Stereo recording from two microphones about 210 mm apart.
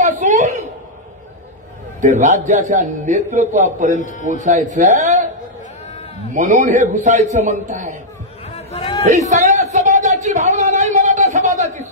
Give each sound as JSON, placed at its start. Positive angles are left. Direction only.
{"t": 0.0, "sound": "a sound", "side_deg": -35}
{"t": 2.0, "sound": "a man's voice", "side_deg": -35}
{"t": 4.0, "sound": "a man's voice", "side_deg": 35}
{"t": 4.3, "sound": "a man's voice", "side_deg": -35}
{"t": 6.3, "sound": "a man's voice", "side_deg": -35}
{"t": 8.5, "sound": "chatter", "side_deg": 25}
{"t": 9.3, "sound": "a sound", "side_deg": -35}